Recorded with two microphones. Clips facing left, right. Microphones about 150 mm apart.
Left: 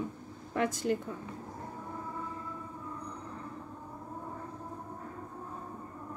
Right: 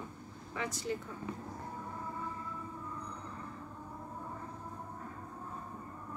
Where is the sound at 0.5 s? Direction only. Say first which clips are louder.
Left 7 dB; 55° left (ahead or behind).